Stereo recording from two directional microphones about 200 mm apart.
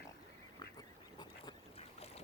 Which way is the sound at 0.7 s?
20° left (ahead or behind).